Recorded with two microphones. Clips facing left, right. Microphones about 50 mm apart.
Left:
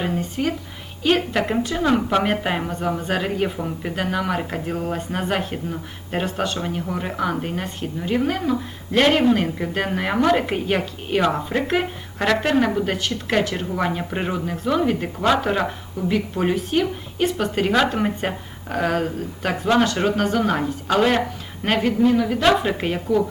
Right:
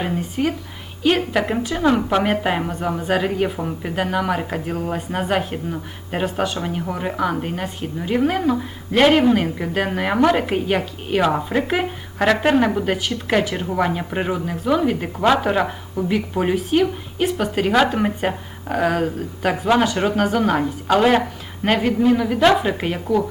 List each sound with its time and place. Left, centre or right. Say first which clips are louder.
0.0 s speech: right 1 dB; centre